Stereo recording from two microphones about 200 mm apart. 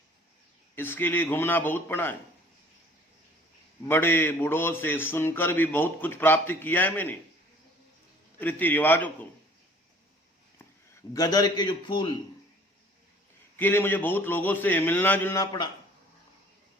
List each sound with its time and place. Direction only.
0.8 s a man's voice: 10° left (ahead or behind)
3.8 s a man's voice: 10° left (ahead or behind)
8.4 s a man's voice: 10° left (ahead or behind)
11.1 s a man's voice: 20° left (ahead or behind)
13.6 s a man's voice: 10° left (ahead or behind)